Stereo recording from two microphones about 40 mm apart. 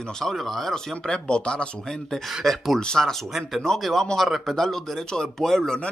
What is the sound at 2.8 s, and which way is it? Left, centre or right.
Speech, centre.